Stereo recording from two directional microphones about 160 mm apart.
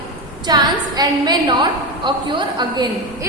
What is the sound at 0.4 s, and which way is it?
A woman's voice, 25° right (ahead or behind).